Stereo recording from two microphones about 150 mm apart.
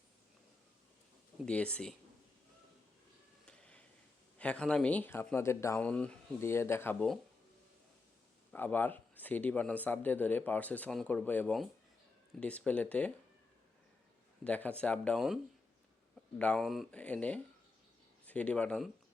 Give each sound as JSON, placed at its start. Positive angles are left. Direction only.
{"t": 1.5, "sound": "a man's voice", "side_deg": 5}
{"t": 3.4, "sound": "a sound", "side_deg": 5}
{"t": 4.4, "sound": "a man's voice", "side_deg": 5}
{"t": 8.5, "sound": "a man's voice", "side_deg": 10}
{"t": 14.4, "sound": "a man's voice", "side_deg": 10}
{"t": 16.4, "sound": "a man's voice", "side_deg": 5}